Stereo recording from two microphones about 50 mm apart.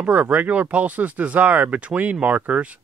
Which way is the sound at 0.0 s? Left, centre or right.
Right.